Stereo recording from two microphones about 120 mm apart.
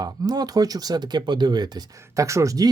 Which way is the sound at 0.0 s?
35° right (ahead or behind).